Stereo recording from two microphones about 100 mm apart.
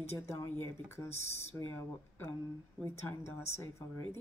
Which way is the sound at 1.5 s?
20° left (ahead or behind).